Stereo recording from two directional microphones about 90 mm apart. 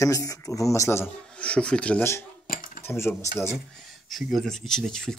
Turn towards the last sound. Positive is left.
turn(degrees=5)  # may be behind; listen again after turning